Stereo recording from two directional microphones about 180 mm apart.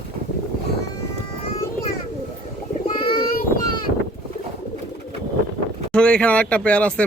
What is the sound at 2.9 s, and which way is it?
Child singing, 30° left (ahead or behind).